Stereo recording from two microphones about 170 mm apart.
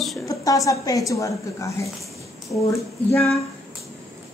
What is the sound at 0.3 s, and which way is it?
A woman's voice, 20° left (ahead or behind).